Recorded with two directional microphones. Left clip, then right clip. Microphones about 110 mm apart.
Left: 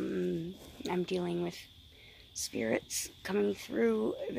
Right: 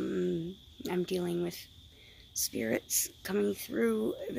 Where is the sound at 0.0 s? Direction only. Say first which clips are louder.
Right 2 dB; 30° right (ahead or behind).